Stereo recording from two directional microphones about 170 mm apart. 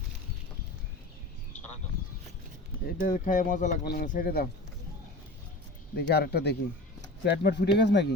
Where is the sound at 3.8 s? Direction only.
60° left (ahead or behind).